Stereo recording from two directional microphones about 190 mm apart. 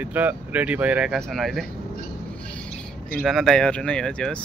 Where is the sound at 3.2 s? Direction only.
Centre (ahead or behind).